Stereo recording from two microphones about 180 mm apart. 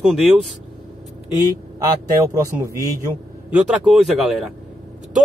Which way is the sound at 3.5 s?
5° right (ahead or behind).